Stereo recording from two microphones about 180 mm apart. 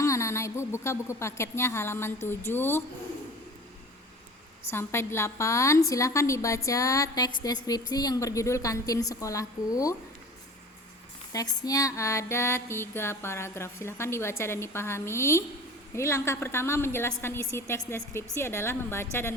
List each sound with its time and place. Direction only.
0.0 s music: 15° left (ahead or behind)
2.2 s a woman's voice: 10° left (ahead or behind)
4.7 s a woman's voice: 15° left (ahead or behind)
11.3 s a woman's voice: 20° left (ahead or behind)